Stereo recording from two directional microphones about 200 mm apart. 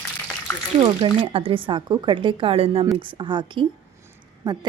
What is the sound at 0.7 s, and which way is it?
Speech, 25° right (ahead or behind).